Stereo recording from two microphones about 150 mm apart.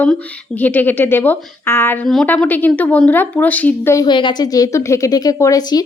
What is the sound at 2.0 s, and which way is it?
A woman's voice, centre (ahead or behind).